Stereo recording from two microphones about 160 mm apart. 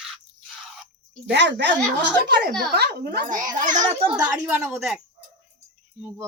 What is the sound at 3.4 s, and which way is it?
Speech, 25° right (ahead or behind).